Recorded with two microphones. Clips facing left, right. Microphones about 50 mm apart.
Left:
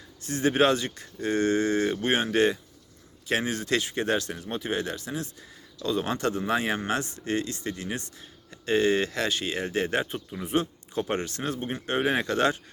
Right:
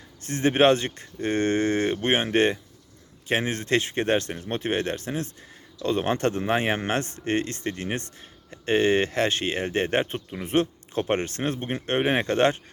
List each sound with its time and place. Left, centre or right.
0.2 s speech: right